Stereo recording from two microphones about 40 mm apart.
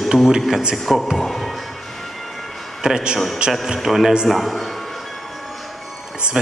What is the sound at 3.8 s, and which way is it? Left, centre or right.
A man's voice, centre.